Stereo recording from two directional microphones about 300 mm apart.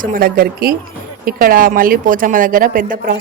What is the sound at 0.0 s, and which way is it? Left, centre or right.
Speech, right.